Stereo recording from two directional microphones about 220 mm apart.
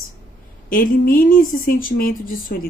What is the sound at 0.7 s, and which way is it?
Speech, 40° left (ahead or behind).